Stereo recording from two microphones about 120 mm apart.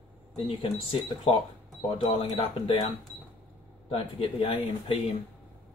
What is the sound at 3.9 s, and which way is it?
Speech, 45° left (ahead or behind).